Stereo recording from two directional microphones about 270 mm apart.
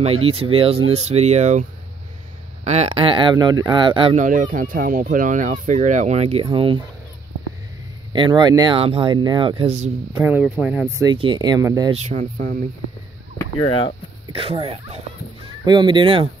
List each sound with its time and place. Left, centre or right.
0.0 s speech: right
8.1 s speech: centre
10.1 s speech: centre
11.9 s speech: right
13.4 s speech: centre
14.3 s speech: right